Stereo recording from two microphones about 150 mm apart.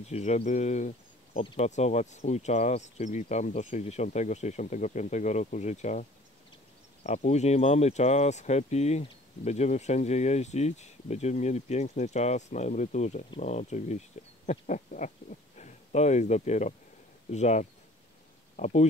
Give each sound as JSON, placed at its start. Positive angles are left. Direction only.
{"t": 0.0, "sound": "speech", "side_deg": 50}
{"t": 1.3, "sound": "speech", "side_deg": 35}
{"t": 1.6, "sound": "speech", "side_deg": 50}
{"t": 7.2, "sound": "speech", "side_deg": 50}